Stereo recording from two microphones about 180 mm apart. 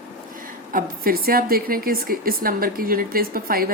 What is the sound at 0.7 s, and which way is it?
Speech, 55° right (ahead or behind).